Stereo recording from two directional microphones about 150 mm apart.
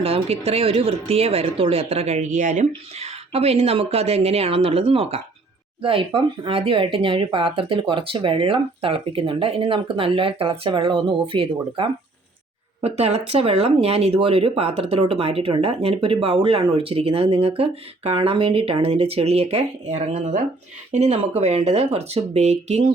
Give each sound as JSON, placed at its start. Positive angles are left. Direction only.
{"t": 0.0, "sound": "speech", "side_deg": -40}